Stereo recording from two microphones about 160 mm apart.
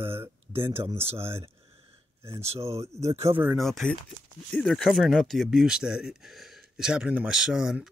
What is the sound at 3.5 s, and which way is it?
Speech, centre (ahead or behind).